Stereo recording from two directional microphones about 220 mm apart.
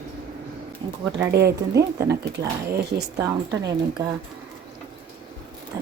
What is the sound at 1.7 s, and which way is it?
Speech, 15° right (ahead or behind).